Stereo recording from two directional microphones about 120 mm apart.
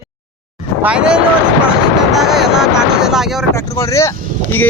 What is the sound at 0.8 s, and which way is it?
Speech, 10° right (ahead or behind).